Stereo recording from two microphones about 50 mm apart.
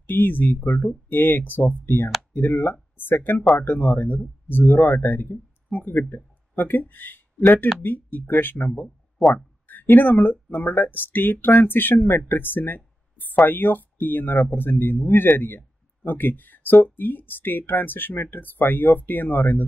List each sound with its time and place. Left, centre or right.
0.0 s speech: left
12.3 s a sound: left
13.5 s speech: left